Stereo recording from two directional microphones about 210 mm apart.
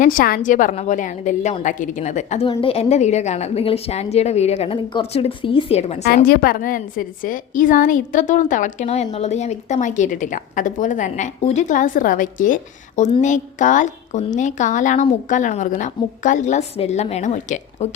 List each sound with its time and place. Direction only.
0.0 s a woman's voice: 40° left (ahead or behind)
6.2 s a woman's voice: 45° left (ahead or behind)
13.0 s a woman's voice: 25° left (ahead or behind)
13.2 s a woman's voice: 35° left (ahead or behind)